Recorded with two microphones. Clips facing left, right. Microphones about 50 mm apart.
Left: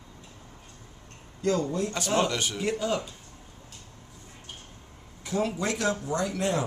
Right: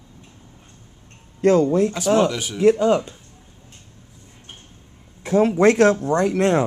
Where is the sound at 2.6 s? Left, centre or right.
Right.